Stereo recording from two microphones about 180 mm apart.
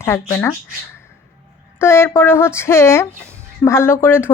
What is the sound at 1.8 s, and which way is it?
A woman's voice, 15° left (ahead or behind).